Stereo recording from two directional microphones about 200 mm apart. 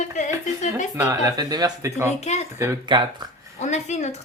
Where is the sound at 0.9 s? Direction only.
15° right (ahead or behind).